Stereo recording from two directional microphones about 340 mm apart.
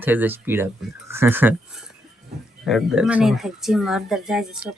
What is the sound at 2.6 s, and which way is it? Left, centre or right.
Speech, centre.